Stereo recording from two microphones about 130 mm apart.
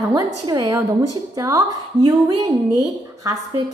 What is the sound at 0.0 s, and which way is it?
A woman's voice, 30° right (ahead or behind).